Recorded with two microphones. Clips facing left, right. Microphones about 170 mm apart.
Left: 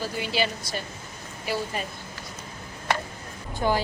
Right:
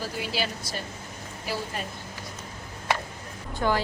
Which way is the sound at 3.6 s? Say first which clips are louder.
Left 1 dB; 20° left (ahead or behind).